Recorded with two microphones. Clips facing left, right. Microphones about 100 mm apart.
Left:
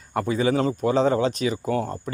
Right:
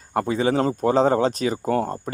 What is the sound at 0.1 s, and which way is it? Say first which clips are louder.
Speech: right 1 dB; 40° right (ahead or behind).